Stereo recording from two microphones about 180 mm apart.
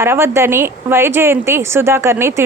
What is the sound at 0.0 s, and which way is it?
Speech, 15° right (ahead or behind).